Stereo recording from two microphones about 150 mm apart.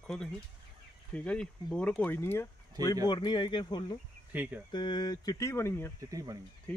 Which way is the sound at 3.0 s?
30° left (ahead or behind).